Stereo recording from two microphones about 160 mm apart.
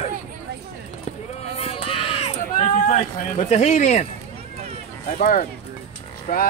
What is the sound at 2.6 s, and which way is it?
Speech, 50° left (ahead or behind).